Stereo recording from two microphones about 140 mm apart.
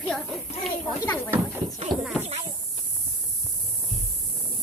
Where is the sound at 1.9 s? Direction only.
35° right (ahead or behind).